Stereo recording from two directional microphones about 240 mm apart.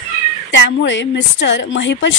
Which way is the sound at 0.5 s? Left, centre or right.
Left.